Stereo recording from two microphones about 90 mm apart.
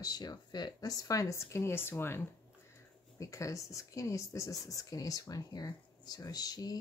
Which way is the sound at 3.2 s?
35° left (ahead or behind).